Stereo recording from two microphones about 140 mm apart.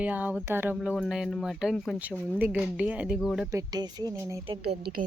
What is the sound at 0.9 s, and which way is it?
Speech, centre (ahead or behind).